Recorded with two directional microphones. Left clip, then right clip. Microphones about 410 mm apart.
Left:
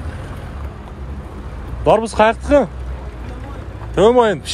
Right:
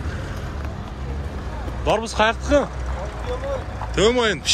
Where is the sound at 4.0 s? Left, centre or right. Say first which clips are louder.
Left 6 dB; centre.